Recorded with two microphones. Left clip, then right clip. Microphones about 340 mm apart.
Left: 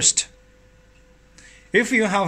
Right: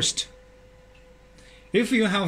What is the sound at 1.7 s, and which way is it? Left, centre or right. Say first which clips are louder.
Speech: left 4 dB; centre.